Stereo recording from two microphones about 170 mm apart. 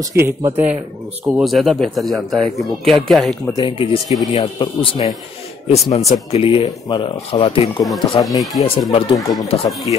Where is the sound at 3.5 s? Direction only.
25° left (ahead or behind).